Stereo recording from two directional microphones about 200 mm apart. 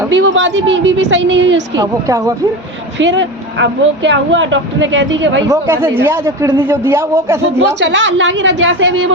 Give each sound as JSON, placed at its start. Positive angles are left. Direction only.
{"t": 0.1, "sound": "speech", "side_deg": -70}
{"t": 1.7, "sound": "a man's voice", "side_deg": -20}
{"t": 3.0, "sound": "speech", "side_deg": -65}
{"t": 5.5, "sound": "a man's voice", "side_deg": -10}
{"t": 7.8, "sound": "a woman's voice", "side_deg": -65}